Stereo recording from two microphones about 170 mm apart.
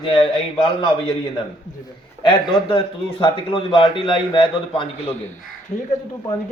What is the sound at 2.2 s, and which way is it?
A man's voice, 30° left (ahead or behind).